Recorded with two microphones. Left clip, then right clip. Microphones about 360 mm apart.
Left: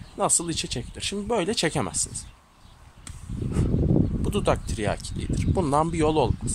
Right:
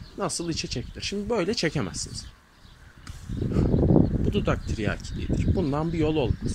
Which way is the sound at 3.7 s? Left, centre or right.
Right.